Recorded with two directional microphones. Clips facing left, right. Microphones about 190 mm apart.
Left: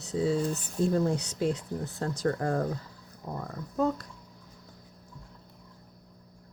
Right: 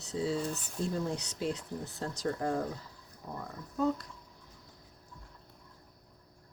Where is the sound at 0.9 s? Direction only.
50° left (ahead or behind).